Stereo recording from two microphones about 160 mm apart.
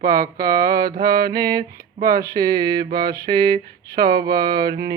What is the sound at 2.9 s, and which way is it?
Mantra, 75° right (ahead or behind).